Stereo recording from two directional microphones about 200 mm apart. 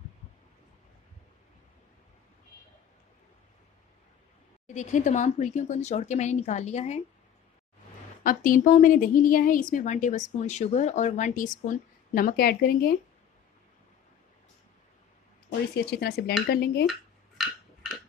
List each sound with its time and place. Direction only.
4.7 s a woman's voice: 35° left (ahead or behind)
8.2 s a woman's voice: 45° left (ahead or behind)
15.7 s speech: 55° left (ahead or behind)